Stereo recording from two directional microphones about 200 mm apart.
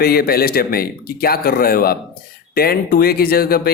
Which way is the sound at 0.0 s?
50° left (ahead or behind).